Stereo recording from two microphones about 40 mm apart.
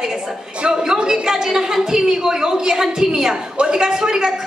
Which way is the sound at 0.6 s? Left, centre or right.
Right.